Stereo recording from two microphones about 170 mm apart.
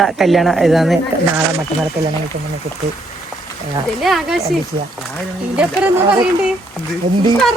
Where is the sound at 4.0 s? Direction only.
Centre (ahead or behind).